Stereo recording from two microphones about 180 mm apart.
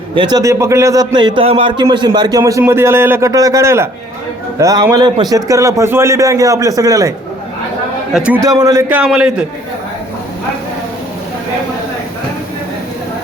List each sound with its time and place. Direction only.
0.2 s a man's voice: 20° right (ahead or behind)
8.1 s a man's voice: 5° right (ahead or behind)
8.4 s a man's voice: 20° right (ahead or behind)